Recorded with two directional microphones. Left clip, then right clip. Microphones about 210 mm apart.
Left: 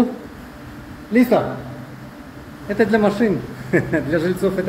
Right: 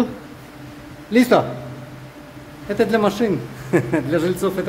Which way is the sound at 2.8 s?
30° right (ahead or behind).